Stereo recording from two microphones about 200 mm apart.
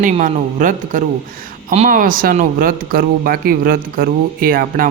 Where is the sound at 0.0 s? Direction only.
40° right (ahead or behind).